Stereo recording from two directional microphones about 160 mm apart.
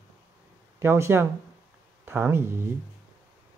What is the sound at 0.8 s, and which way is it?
Speech, 15° right (ahead or behind).